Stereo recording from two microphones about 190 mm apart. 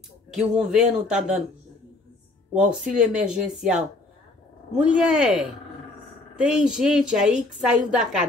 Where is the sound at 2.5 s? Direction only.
5° right (ahead or behind).